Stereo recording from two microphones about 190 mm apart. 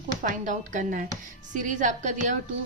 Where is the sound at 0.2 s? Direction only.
40° right (ahead or behind).